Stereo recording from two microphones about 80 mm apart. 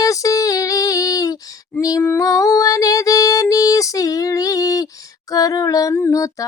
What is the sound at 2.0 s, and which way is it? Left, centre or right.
Music, left.